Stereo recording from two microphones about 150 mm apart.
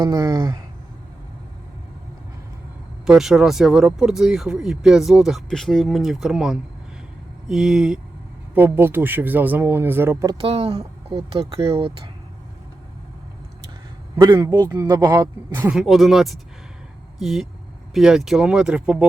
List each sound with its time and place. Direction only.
0.0 s speech: 25° right (ahead or behind)
3.1 s speech: 5° right (ahead or behind); by 10.3 s 20° right (ahead or behind)
10.4 s speech: 40° right (ahead or behind)
14.3 s speech: 20° right (ahead or behind)